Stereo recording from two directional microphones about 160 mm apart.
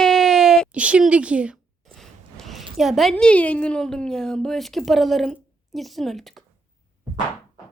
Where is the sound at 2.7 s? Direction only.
Centre (ahead or behind).